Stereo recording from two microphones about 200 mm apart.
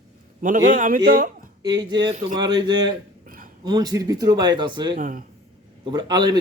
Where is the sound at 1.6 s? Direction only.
20° right (ahead or behind).